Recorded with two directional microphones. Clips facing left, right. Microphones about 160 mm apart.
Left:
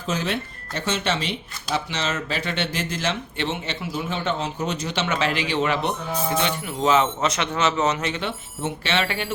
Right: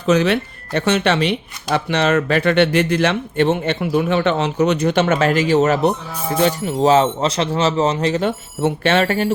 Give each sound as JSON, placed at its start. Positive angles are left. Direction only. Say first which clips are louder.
{"t": 0.1, "sound": "speech", "louder": "right 11 dB", "side_deg": -70}